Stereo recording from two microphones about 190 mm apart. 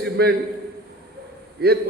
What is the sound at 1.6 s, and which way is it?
Speech, 55° right (ahead or behind).